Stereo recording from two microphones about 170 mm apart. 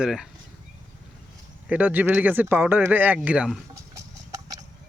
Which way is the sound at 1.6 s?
10° right (ahead or behind).